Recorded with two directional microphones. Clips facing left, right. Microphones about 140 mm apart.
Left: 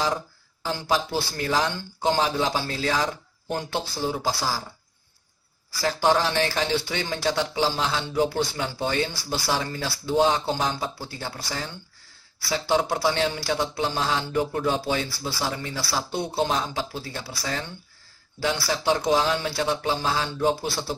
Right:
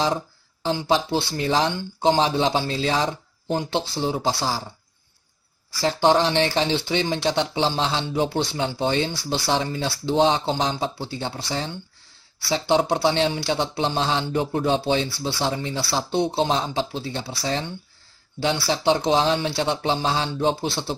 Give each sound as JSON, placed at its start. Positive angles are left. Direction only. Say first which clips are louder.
{"t": 0.0, "sound": "speech", "louder": "right 3 dB", "side_deg": -25}
{"t": 5.8, "sound": "speech", "louder": "right 3 dB", "side_deg": -25}